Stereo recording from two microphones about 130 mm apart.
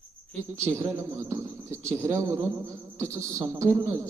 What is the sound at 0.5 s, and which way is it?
Speech, 25° right (ahead or behind).